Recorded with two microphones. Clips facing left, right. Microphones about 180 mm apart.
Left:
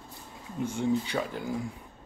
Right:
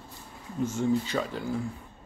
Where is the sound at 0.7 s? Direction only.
10° left (ahead or behind).